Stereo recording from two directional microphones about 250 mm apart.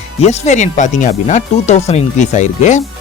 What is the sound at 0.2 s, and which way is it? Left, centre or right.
Speech, left.